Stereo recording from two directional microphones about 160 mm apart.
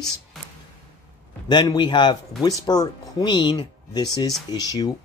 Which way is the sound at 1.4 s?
25° left (ahead or behind).